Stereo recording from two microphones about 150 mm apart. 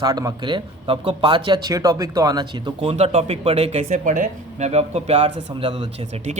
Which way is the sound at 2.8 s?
45° right (ahead or behind).